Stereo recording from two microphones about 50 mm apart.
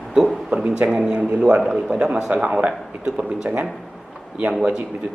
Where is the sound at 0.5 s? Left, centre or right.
Right.